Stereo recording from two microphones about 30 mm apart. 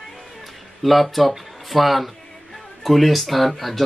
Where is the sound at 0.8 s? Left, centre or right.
Centre.